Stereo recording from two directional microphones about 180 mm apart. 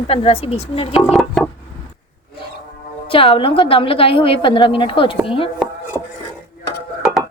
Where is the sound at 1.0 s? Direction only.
Centre (ahead or behind).